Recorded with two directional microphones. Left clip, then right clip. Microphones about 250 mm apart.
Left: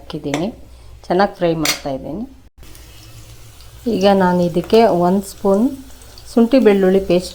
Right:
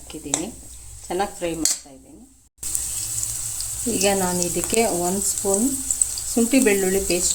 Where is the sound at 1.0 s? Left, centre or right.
Left.